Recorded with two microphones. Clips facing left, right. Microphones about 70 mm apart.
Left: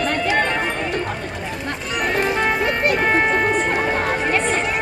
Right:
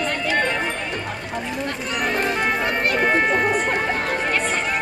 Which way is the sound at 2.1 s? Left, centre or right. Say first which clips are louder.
Left 4 dB; centre.